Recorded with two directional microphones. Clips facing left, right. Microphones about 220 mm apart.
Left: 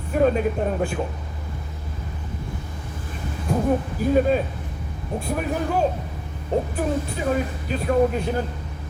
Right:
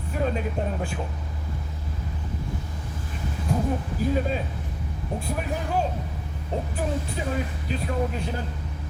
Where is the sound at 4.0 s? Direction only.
55° left (ahead or behind).